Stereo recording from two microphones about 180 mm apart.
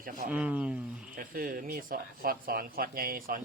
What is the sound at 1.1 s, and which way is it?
Speech, 55° right (ahead or behind).